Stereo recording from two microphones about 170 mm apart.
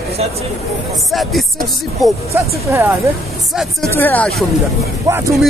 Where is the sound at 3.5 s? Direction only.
Centre (ahead or behind).